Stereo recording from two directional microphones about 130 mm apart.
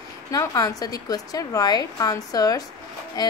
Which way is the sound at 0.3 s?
25° left (ahead or behind).